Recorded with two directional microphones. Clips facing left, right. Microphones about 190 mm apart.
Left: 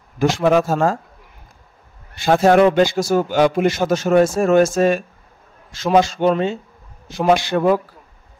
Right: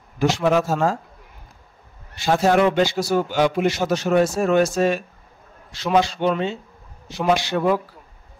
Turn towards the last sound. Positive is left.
turn(degrees=50)  # may be behind; listen again after turning